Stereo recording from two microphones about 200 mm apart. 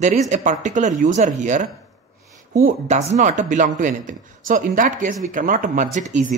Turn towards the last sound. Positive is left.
turn(degrees=-40)  # may be behind; listen again after turning